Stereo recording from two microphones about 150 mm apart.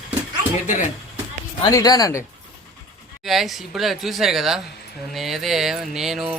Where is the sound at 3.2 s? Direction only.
Centre (ahead or behind).